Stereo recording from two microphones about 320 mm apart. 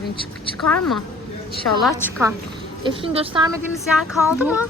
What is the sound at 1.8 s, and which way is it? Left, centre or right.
A woman's voice, centre.